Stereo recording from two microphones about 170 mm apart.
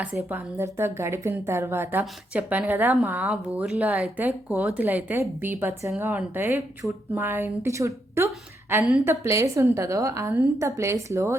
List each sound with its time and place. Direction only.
0.3 s a woman's voice: 15° right (ahead or behind)